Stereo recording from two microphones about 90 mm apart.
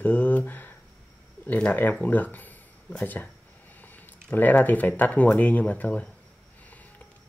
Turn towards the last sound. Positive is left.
turn(degrees=15)  # may be behind; listen again after turning